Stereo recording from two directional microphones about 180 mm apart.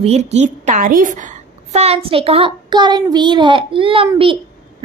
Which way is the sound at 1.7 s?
35° right (ahead or behind).